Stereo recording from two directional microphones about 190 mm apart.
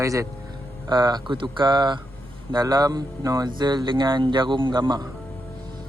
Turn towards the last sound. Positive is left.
turn(degrees=-25)  # may be behind; listen again after turning